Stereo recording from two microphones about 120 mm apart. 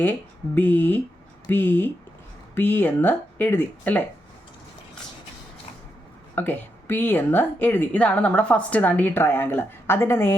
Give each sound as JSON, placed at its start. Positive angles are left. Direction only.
{"t": 0.5, "sound": "a woman's voice", "side_deg": 15}
{"t": 6.3, "sound": "a woman's voice", "side_deg": 15}